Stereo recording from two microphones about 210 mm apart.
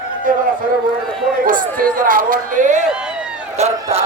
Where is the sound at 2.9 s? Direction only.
5° right (ahead or behind).